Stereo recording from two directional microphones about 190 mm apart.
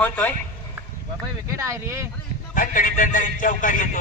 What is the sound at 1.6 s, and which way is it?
Speech, 15° right (ahead or behind).